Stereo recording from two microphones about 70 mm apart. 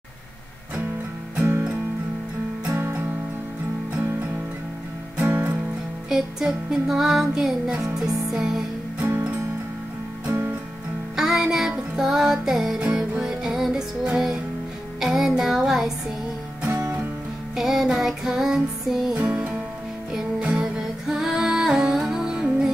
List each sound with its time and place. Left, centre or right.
2.6 s music: right
5.1 s music: right
6.0 s music: centre
10.2 s music: right
11.1 s music: centre
17.6 s music: centre
19.1 s music: centre